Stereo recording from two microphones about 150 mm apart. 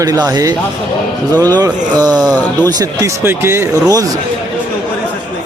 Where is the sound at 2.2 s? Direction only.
10° left (ahead or behind).